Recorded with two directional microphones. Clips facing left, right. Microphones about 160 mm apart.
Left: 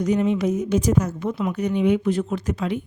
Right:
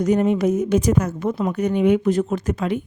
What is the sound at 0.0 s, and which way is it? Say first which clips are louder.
A woman's voice: right 3 dB; 50° right (ahead or behind).